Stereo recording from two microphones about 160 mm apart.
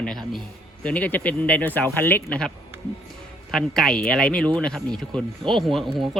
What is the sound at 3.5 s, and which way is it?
Speech, 5° left (ahead or behind).